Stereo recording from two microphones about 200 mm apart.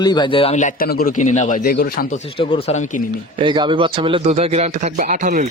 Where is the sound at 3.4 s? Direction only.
25° right (ahead or behind); by 5.4 s 40° right (ahead or behind).